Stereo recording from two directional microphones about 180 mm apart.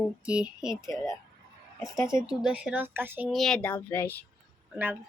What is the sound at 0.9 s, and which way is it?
Speech, 20° left (ahead or behind).